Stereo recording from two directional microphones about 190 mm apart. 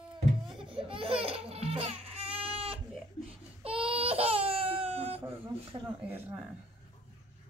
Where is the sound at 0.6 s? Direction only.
25° right (ahead or behind).